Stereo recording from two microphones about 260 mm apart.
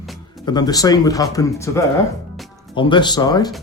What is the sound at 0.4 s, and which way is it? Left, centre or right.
Speech, centre.